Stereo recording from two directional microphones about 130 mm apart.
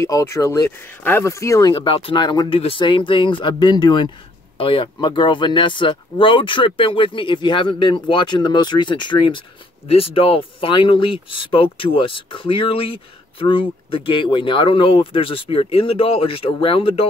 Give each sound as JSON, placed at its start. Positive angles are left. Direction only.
{"t": 0.0, "sound": "speech", "side_deg": 20}
{"t": 1.7, "sound": "speech", "side_deg": 45}
{"t": 9.8, "sound": "speech", "side_deg": 50}